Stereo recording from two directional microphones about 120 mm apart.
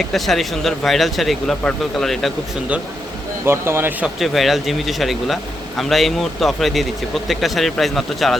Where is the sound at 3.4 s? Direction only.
20° right (ahead or behind).